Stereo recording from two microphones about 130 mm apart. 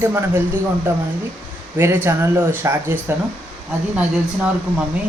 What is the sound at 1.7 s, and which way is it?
Speech, 15° right (ahead or behind).